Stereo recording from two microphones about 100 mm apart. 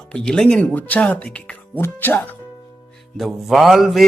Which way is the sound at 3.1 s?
Centre (ahead or behind).